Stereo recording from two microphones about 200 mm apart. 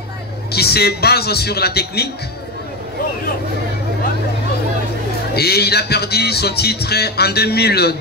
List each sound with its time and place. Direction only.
0.5 s speech: 50° left (ahead or behind)
5.3 s speech: 55° left (ahead or behind)